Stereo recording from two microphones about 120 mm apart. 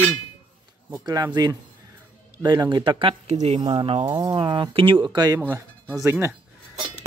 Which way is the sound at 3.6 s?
45° right (ahead or behind).